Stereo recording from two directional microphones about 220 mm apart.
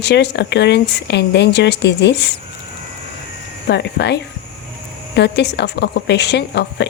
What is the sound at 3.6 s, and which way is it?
Speech, 50° left (ahead or behind).